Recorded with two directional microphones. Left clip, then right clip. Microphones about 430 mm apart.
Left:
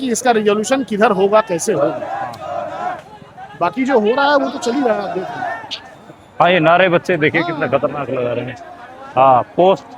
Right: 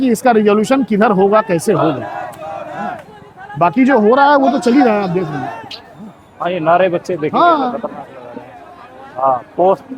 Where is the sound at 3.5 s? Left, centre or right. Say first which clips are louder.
Right 4 dB; right.